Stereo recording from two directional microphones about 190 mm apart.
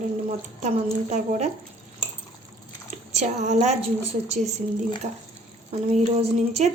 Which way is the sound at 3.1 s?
35° right (ahead or behind).